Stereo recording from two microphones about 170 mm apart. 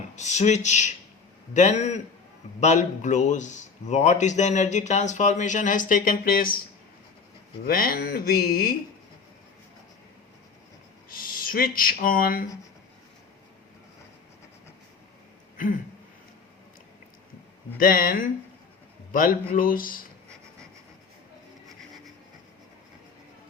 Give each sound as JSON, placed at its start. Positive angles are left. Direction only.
{"t": 0.2, "sound": "a man's voice", "side_deg": 45}
{"t": 7.7, "sound": "speech", "side_deg": 55}
{"t": 11.1, "sound": "speech", "side_deg": 55}
{"t": 17.7, "sound": "speech", "side_deg": 55}